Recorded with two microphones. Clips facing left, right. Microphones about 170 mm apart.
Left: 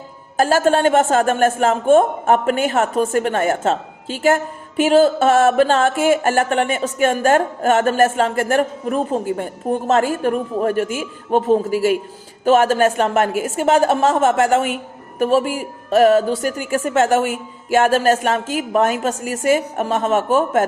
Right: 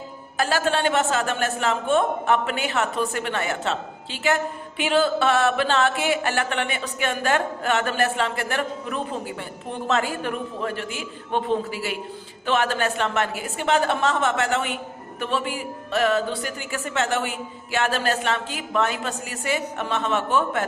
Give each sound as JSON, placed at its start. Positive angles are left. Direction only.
{"t": 0.3, "sound": "speech", "side_deg": 45}